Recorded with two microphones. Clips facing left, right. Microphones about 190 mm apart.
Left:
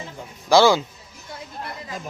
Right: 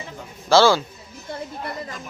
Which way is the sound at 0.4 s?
15° left (ahead or behind).